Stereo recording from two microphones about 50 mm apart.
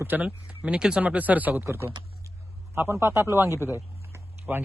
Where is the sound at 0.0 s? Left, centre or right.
Right.